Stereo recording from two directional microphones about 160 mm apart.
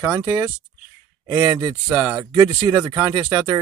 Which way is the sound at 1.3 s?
20° right (ahead or behind).